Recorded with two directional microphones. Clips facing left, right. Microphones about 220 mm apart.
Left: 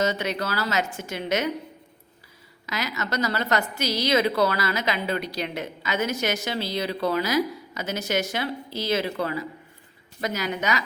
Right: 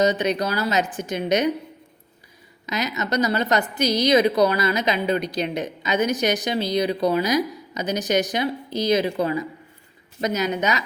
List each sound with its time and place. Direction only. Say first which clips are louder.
0.0 s a woman's voice: right 5 dB; 15° right (ahead or behind)
2.6 s a woman's voice: right 4 dB; 20° right (ahead or behind)